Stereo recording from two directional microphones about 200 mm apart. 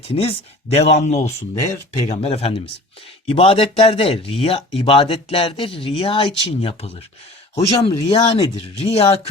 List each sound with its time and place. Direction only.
0.1 s speech: 30° left (ahead or behind)